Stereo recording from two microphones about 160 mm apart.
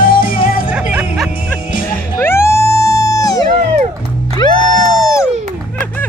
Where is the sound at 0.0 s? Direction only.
60° left (ahead or behind).